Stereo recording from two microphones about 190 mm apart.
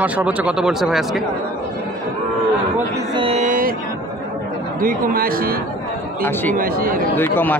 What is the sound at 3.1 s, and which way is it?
Mantra, 30° right (ahead or behind).